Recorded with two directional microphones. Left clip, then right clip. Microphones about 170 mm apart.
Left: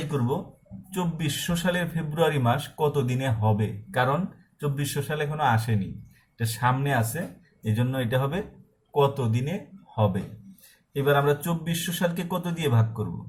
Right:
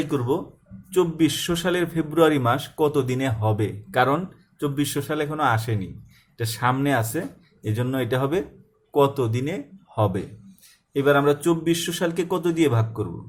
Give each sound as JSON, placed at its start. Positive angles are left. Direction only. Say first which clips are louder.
{"t": 0.0, "sound": "speech", "louder": "right 5 dB", "side_deg": -45}